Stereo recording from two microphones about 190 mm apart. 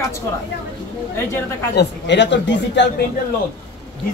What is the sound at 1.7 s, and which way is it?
A man's voice, 65° left (ahead or behind).